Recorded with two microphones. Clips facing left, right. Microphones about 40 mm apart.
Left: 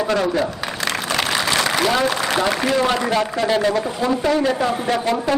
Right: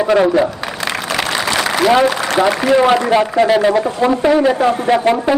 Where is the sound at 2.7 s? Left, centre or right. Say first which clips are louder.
Right 9 dB; right.